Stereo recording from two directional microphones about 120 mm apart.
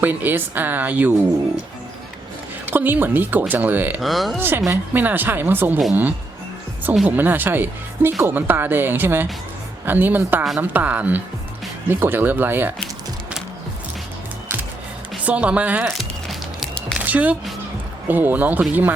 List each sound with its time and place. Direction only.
0.0 s a woman's voice: 15° right (ahead or behind)
2.6 s a woman's voice: 15° right (ahead or behind)
4.0 s speech: centre (ahead or behind)
4.4 s a woman's voice: 20° right (ahead or behind)
7.2 s a woman's voice: 15° right (ahead or behind)
15.2 s a woman's voice: 10° right (ahead or behind)
15.8 s music: centre (ahead or behind)
17.0 s music: 10° right (ahead or behind)
18.1 s a woman's voice: 15° right (ahead or behind)